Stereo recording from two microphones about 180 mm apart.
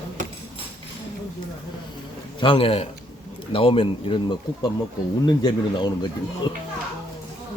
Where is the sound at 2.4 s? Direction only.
30° left (ahead or behind).